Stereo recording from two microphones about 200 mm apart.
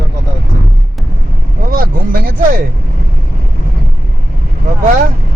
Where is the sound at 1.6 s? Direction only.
45° right (ahead or behind).